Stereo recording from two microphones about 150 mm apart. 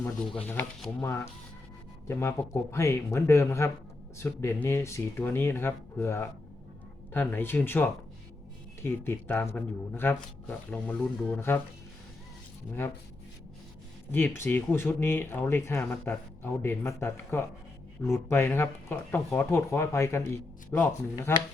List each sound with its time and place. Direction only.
0.3 s speech: 15° left (ahead or behind)
14.1 s speech: 15° left (ahead or behind)